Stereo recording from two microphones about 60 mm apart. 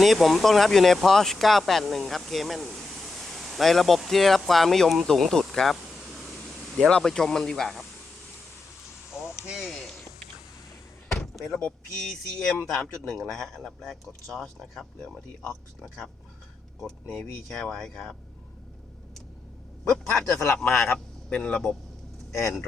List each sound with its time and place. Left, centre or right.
0.0 s speech: centre
6.7 s speech: centre
9.5 s speech: centre
11.1 s door: centre
11.6 s speech: centre
15.0 s speech: centre
17.1 s speech: centre
19.9 s speech: centre
20.2 s speech: left
20.6 s speech: centre